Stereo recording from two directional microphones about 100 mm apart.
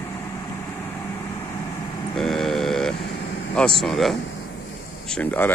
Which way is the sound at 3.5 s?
5° left (ahead or behind).